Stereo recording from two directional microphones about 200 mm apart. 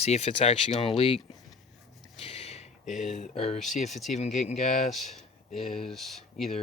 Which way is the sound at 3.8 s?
Centre (ahead or behind).